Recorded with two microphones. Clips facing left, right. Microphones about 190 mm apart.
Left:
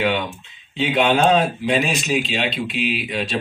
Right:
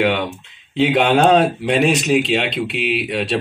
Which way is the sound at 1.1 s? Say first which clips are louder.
Right 3 dB; 40° right (ahead or behind).